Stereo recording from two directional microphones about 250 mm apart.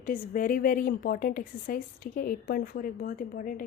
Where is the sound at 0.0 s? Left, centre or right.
Left.